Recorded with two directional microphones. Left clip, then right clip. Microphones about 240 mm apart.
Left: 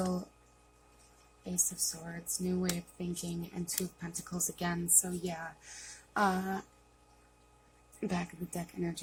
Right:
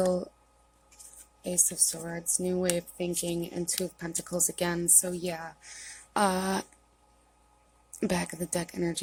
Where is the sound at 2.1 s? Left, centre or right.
Right.